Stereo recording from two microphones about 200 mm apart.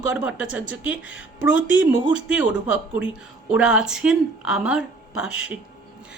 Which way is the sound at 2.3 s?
5° right (ahead or behind).